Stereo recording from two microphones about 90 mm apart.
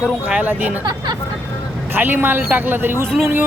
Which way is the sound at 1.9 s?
20° right (ahead or behind).